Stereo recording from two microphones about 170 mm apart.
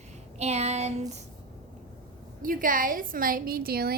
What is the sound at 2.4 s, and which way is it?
A woman's voice, 55° right (ahead or behind).